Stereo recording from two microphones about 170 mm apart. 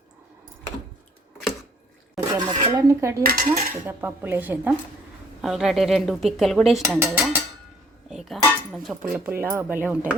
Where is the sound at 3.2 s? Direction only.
55° right (ahead or behind).